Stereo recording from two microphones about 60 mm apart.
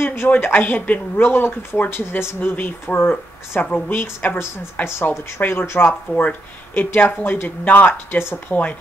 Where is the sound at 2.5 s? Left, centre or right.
Left.